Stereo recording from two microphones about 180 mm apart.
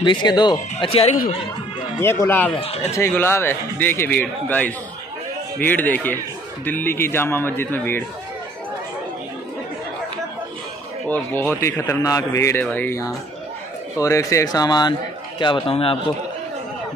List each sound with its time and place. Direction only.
0.0 s a man's voice: 25° left (ahead or behind)
2.0 s a man's voice: 15° left (ahead or behind)
2.6 s speech: 35° left (ahead or behind)
2.9 s a man's voice: 15° left (ahead or behind)
11.1 s a man's voice: 10° left (ahead or behind); by 16.0 s 30° left (ahead or behind)